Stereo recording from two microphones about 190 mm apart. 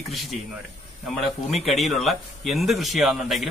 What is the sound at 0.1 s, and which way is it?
Speech, centre (ahead or behind).